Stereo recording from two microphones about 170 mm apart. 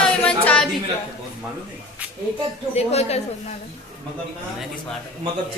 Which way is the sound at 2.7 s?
40° left (ahead or behind).